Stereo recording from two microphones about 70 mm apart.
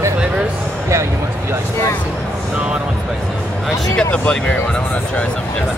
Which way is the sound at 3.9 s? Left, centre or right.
Centre.